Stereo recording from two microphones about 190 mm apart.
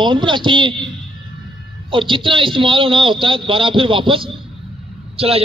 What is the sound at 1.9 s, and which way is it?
A man's voice, 25° right (ahead or behind).